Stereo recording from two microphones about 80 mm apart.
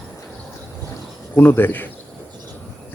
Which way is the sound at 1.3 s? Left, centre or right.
Left.